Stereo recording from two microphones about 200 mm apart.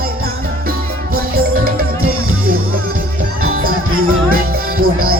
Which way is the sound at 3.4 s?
45° right (ahead or behind).